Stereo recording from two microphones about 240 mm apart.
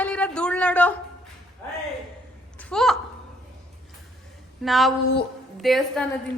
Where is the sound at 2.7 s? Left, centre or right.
Centre.